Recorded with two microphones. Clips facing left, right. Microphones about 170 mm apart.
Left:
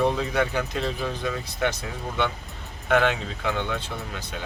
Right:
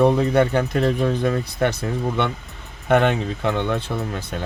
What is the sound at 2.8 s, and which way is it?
Speech, 55° right (ahead or behind).